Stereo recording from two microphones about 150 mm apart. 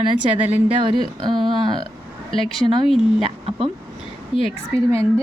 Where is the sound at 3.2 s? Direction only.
40° right (ahead or behind).